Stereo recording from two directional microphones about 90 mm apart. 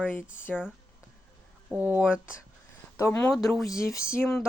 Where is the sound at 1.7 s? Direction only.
20° right (ahead or behind).